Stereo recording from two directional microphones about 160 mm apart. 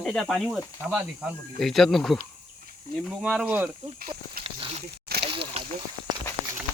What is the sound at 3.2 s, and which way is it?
Speech, 5° right (ahead or behind).